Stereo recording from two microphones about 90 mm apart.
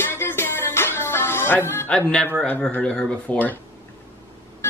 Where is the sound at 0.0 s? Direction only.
25° left (ahead or behind).